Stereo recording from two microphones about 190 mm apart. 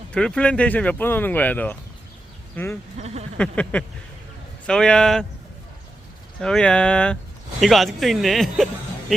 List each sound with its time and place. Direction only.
0.1 s speech: 5° left (ahead or behind)
3.0 s a sound: 35° right (ahead or behind)
3.3 s speech: 5° left (ahead or behind)
6.4 s speech: 5° left (ahead or behind)